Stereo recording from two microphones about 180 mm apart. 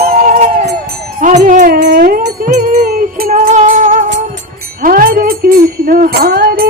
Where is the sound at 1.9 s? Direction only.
50° right (ahead or behind).